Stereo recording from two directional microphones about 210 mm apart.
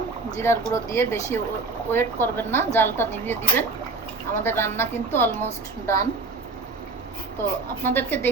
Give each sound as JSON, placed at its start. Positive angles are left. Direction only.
{"t": 0.3, "sound": "speech", "side_deg": 10}
{"t": 7.9, "sound": "speech", "side_deg": 10}